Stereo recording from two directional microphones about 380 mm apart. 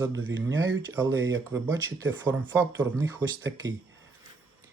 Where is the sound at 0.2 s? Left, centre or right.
Right.